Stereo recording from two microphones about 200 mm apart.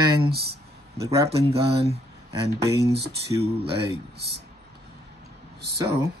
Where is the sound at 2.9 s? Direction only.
55° right (ahead or behind).